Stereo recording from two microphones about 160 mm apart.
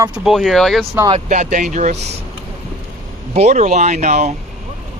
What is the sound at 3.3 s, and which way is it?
Speech, 45° right (ahead or behind).